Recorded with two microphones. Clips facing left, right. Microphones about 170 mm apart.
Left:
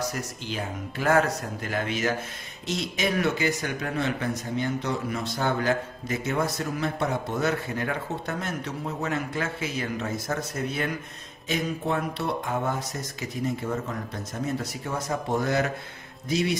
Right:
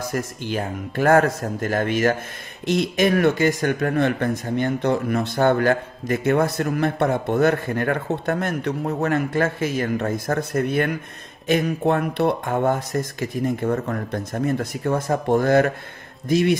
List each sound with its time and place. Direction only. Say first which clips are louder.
0.0 s speech: right 5 dB; 50° right (ahead or behind)